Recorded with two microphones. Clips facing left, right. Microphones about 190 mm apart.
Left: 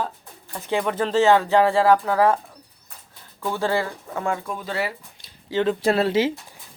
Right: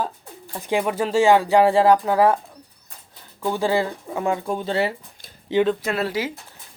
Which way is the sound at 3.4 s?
15° right (ahead or behind).